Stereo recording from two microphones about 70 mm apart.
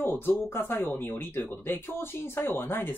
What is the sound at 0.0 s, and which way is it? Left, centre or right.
Speech, left.